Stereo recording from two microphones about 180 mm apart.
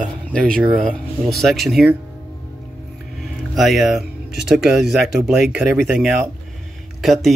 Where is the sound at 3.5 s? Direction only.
Centre (ahead or behind).